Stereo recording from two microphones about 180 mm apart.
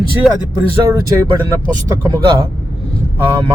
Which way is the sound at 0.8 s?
20° right (ahead or behind).